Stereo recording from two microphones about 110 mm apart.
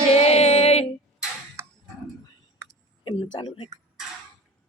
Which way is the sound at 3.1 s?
50° left (ahead or behind).